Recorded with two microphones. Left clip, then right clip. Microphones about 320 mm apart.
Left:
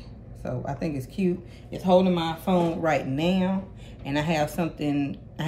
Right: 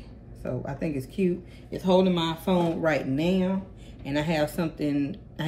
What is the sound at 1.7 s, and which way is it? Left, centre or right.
Speech, centre.